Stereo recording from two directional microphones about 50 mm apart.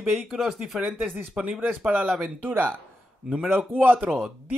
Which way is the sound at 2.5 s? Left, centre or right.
Right.